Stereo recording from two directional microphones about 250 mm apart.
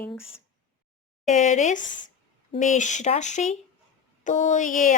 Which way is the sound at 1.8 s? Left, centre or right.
Left.